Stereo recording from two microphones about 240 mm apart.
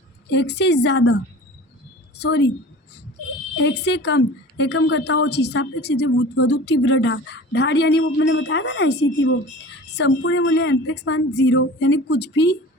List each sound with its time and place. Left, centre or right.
0.3 s a woman's voice: left
3.5 s speech: left